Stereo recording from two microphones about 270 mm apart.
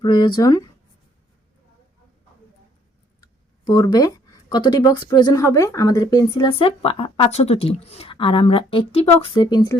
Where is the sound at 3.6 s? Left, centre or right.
Centre.